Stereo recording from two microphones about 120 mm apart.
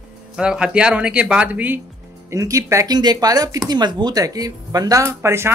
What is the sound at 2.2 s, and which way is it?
Speech, 25° right (ahead or behind).